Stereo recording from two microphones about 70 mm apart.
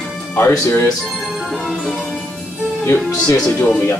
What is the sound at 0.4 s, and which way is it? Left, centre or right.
Speech, left.